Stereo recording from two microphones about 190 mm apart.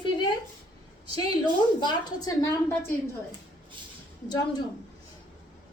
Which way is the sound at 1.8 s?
20° left (ahead or behind).